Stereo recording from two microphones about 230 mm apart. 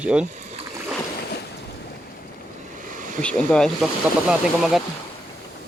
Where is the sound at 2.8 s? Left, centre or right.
Right.